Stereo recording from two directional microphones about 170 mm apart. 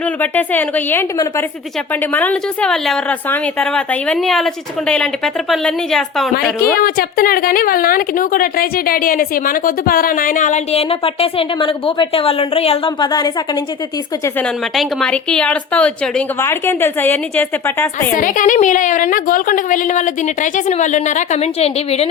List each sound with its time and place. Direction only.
0.0 s a woman's voice: 10° left (ahead or behind)
6.7 s a woman's voice: 60° left (ahead or behind); by 13.3 s 30° left (ahead or behind)
14.3 s a woman's voice: 5° left (ahead or behind)
18.1 s a woman's voice: 50° left (ahead or behind); by 22.1 s 35° left (ahead or behind)